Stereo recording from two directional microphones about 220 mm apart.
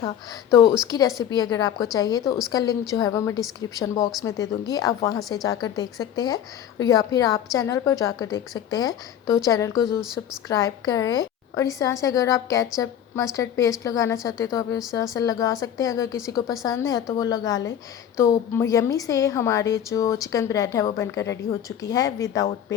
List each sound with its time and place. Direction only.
0.9 s a woman's voice: 15° left (ahead or behind)